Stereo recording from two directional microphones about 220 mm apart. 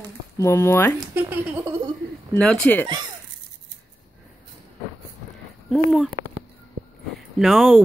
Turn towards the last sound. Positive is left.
turn(degrees=0)  # may be behind; listen again after turning